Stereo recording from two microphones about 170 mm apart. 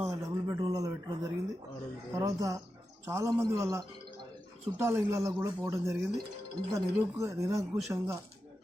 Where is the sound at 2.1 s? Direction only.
20° right (ahead or behind).